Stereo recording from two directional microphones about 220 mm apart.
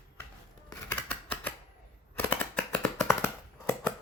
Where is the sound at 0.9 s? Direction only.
5° left (ahead or behind).